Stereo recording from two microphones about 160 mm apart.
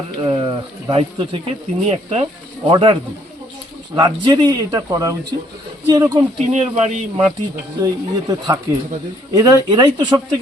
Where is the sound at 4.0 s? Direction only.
25° right (ahead or behind).